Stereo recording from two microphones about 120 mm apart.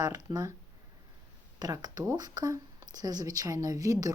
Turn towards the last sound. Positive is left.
turn(degrees=-30)  # may be behind; listen again after turning